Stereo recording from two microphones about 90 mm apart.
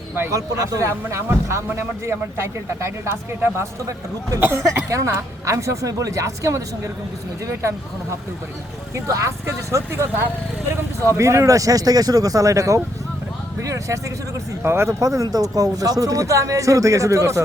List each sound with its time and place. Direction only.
0.2 s speech: 35° right (ahead or behind)
9.0 s speech: 35° right (ahead or behind)